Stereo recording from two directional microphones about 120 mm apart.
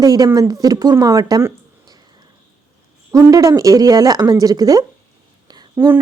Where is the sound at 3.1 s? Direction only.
25° right (ahead or behind).